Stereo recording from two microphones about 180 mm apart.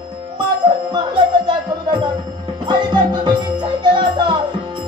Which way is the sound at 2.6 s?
25° right (ahead or behind).